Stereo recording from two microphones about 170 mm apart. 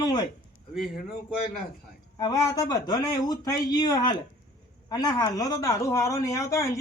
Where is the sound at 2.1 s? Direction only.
20° left (ahead or behind).